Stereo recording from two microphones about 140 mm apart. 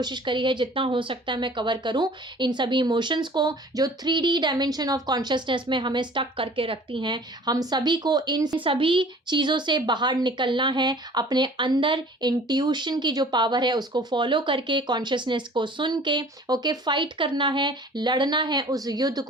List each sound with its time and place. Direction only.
0.0 s a woman's voice: 35° right (ahead or behind)